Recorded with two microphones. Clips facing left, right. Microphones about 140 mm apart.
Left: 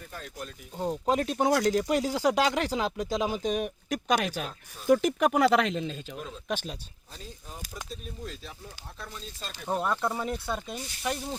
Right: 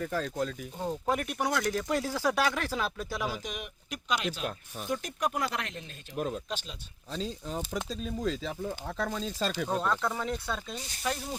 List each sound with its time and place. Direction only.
0.0 s speech: 90° right
0.8 s speech: 15° left (ahead or behind); by 4.4 s 50° left (ahead or behind)
4.9 s speech: 90° left
6.1 s speech: 55° right (ahead or behind)
6.5 s speech: 55° left (ahead or behind)
7.1 s speech: 90° right
9.6 s speech: 15° left (ahead or behind)